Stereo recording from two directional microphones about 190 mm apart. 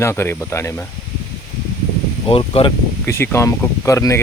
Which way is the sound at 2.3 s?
30° left (ahead or behind).